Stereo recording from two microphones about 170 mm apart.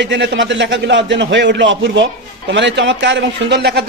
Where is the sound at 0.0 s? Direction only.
90° right.